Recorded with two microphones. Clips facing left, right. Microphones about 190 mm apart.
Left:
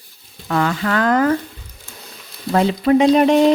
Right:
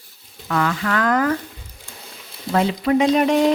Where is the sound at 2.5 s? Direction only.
35° left (ahead or behind).